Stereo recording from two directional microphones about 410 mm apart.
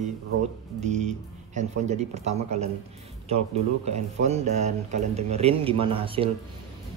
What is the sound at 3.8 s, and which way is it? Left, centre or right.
Speech, centre.